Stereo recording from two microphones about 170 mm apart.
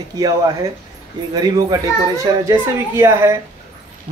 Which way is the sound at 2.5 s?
15° right (ahead or behind).